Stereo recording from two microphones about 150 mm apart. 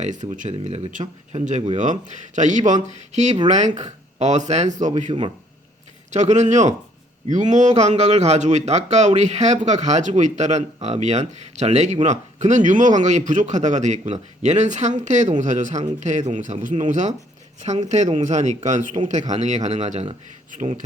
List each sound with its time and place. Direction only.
0.0 s a man's voice: 55° right (ahead or behind)
5.1 s a man's voice: 35° right (ahead or behind)
6.1 s a man's voice: 50° right (ahead or behind)